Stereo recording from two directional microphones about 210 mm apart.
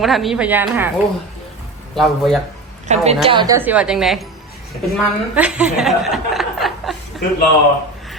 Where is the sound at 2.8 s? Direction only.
30° right (ahead or behind).